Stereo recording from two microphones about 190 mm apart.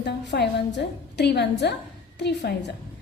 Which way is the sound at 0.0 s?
65° left (ahead or behind).